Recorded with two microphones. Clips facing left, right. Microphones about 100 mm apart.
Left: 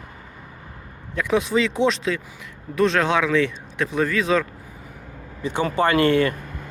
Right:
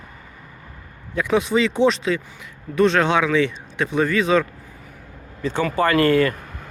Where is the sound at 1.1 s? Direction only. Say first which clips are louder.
Right 1 dB; centre (ahead or behind).